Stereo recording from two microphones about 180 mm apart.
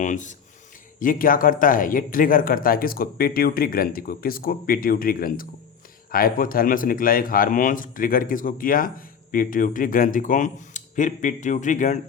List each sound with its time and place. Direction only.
0.0 s speech: 45° left (ahead or behind)